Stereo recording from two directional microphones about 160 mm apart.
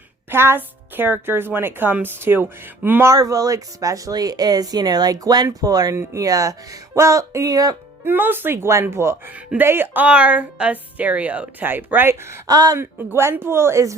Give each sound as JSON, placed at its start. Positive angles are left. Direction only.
{"t": 0.3, "sound": "a woman's voice", "side_deg": -15}